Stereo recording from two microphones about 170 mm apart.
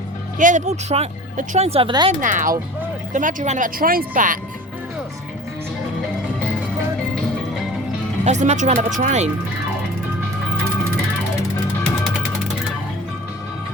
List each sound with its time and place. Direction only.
0.3 s speech: 45° right (ahead or behind); by 2.1 s 30° right (ahead or behind)
2.2 s speech: 50° right (ahead or behind)
8.2 s speech: 40° right (ahead or behind)